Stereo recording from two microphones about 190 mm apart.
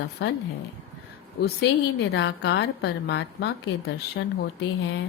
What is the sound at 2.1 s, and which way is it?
A woman's voice, 65° left (ahead or behind).